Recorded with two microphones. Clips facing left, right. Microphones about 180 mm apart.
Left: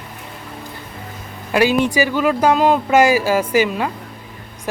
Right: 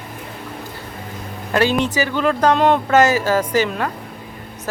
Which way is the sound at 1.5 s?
10° left (ahead or behind).